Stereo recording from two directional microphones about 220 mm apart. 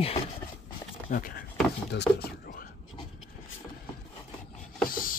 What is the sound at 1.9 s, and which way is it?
Speech, 50° left (ahead or behind).